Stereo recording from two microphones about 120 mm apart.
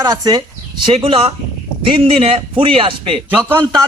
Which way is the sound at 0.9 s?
50° right (ahead or behind).